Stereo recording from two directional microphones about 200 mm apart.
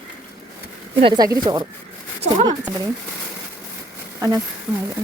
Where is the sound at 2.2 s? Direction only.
35° right (ahead or behind).